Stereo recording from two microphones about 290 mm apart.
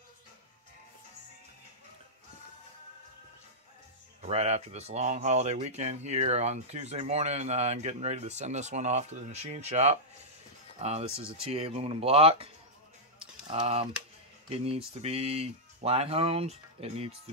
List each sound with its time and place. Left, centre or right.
4.3 s speech: right
13.5 s speech: centre